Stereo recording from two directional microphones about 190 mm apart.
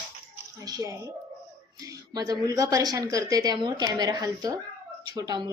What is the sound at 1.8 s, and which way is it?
Speech, 20° right (ahead or behind).